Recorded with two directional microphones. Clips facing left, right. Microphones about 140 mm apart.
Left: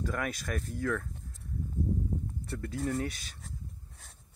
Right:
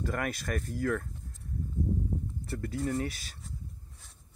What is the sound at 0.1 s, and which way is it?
Speech, centre (ahead or behind).